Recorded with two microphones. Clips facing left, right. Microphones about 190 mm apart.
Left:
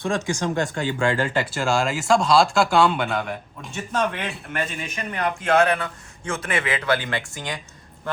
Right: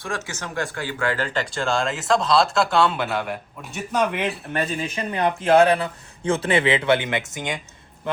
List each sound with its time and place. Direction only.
0.5 s speech: 20° left (ahead or behind); by 3.8 s 5° right (ahead or behind)
3.9 s speech: 15° right (ahead or behind)
4.5 s speech: 35° right (ahead or behind)